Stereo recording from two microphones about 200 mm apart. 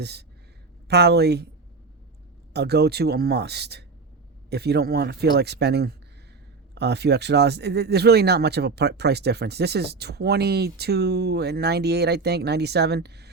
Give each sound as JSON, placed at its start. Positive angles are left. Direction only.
{"t": 0.0, "sound": "speech", "side_deg": -55}
{"t": 2.5, "sound": "speech", "side_deg": -55}